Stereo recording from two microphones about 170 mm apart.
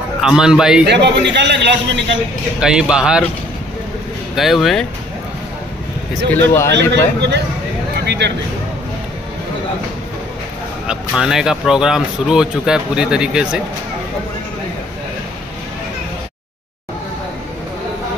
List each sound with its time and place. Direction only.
0.2 s speech: 5° right (ahead or behind)
0.8 s a man's voice: 90° right
2.6 s speech: 5° right (ahead or behind)
4.4 s speech: centre (ahead or behind)
6.4 s a man's voice: 15° left (ahead or behind)
8.0 s a sound: 85° right
10.9 s speech: 5° right (ahead or behind)